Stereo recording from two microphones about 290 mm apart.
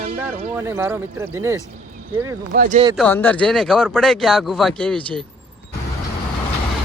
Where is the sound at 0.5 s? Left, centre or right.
Centre.